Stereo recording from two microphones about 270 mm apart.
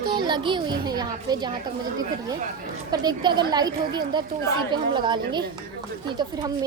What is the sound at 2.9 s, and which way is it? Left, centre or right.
A woman's voice, centre.